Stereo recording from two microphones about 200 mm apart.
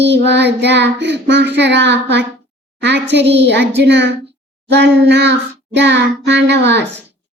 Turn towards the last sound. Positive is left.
turn(degrees=-60)  # may be behind; listen again after turning